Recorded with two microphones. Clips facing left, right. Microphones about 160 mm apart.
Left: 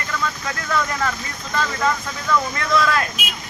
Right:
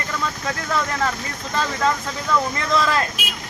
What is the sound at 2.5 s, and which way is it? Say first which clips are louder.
Speech: left 1 dB; 30° right (ahead or behind).